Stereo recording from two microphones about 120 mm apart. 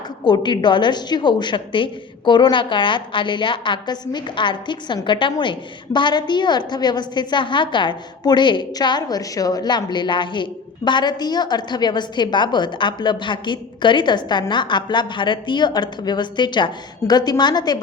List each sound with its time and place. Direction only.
0.3 s a woman's voice: 40° left (ahead or behind)